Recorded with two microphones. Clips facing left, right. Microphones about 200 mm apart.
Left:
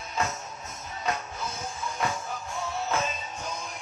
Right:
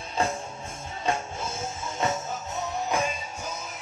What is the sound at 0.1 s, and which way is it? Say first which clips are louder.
Music: right 4 dB; 30° right (ahead or behind).